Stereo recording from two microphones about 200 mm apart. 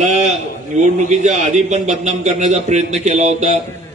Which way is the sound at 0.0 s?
35° right (ahead or behind).